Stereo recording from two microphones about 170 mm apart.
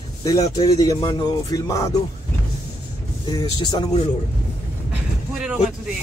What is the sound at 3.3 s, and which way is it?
Speech, 25° left (ahead or behind).